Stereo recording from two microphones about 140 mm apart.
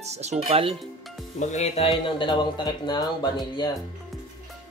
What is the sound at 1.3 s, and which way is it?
Speech, 55° left (ahead or behind).